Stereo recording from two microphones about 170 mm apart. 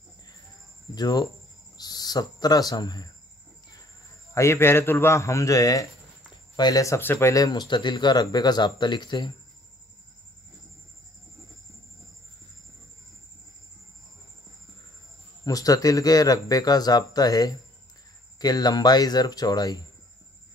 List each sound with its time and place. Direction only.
0.9 s speech: 25° left (ahead or behind)
4.3 s a man's voice: 15° left (ahead or behind)
15.4 s speech: 20° left (ahead or behind)